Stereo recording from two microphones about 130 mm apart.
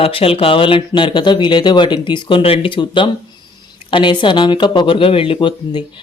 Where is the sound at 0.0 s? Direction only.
45° left (ahead or behind).